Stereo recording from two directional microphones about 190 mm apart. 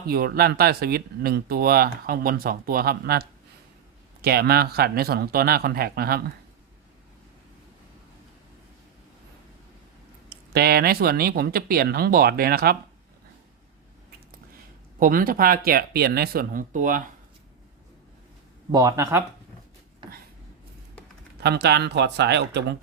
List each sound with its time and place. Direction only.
0.1 s speech: 55° right (ahead or behind)
10.2 s speech: 55° right (ahead or behind)
14.9 s speech: 45° right (ahead or behind)
18.7 s speech: 20° right (ahead or behind)
20.0 s a sound: 25° right (ahead or behind)
21.4 s speech: 60° right (ahead or behind)